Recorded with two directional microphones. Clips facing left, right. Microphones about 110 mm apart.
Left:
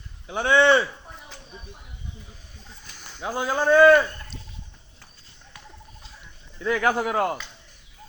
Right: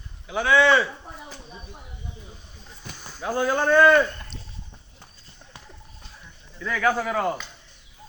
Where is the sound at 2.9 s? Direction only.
15° right (ahead or behind).